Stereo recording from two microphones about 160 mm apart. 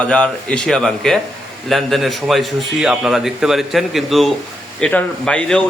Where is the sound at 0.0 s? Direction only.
5° left (ahead or behind).